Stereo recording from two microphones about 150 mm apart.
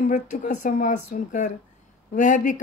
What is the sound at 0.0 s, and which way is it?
A woman's voice, 60° left (ahead or behind).